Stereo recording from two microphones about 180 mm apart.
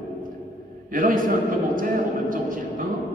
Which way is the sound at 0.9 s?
50° right (ahead or behind).